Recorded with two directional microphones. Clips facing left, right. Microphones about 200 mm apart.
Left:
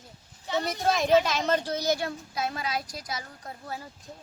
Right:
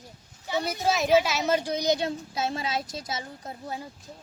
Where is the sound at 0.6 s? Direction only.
Centre (ahead or behind); by 3.9 s 20° right (ahead or behind).